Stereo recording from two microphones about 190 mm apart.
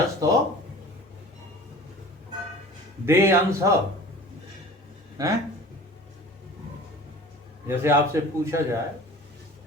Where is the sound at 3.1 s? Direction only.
15° right (ahead or behind).